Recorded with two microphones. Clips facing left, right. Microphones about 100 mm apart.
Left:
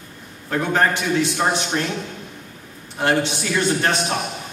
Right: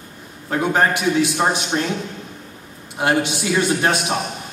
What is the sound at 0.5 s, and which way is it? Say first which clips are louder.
A man's voice: right 1 dB; 15° right (ahead or behind).